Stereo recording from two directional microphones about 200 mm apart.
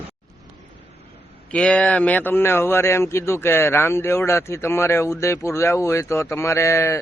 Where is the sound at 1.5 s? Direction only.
5° left (ahead or behind).